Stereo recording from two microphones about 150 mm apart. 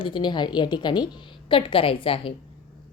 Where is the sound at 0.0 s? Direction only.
30° left (ahead or behind).